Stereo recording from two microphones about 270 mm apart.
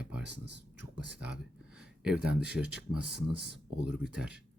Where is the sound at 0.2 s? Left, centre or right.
Right.